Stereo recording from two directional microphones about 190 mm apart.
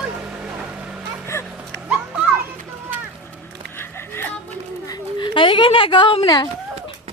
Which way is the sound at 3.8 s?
10° left (ahead or behind).